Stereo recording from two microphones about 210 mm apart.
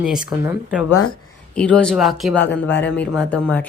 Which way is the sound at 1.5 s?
5° left (ahead or behind).